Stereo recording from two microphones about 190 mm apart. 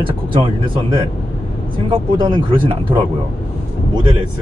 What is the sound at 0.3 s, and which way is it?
Speech, 25° right (ahead or behind).